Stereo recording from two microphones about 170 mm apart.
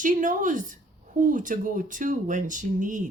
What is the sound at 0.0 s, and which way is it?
A woman's voice, 50° right (ahead or behind).